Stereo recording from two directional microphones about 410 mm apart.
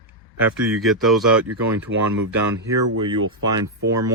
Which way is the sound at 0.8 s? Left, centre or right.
Centre.